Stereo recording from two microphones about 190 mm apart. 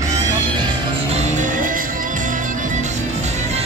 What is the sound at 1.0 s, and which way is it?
Music, 35° right (ahead or behind).